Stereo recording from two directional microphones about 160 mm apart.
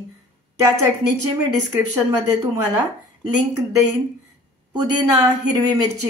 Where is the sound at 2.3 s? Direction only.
20° right (ahead or behind).